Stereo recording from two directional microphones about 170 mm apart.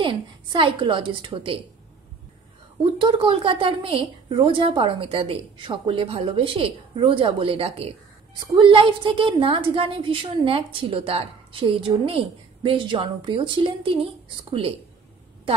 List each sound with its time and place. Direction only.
0.0 s a woman's voice: 30° right (ahead or behind)
3.0 s a woman's voice: 30° right (ahead or behind)